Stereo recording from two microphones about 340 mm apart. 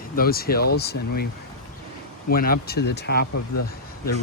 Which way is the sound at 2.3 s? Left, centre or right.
Left.